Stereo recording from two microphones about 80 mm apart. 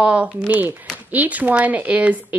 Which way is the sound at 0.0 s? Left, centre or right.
Centre.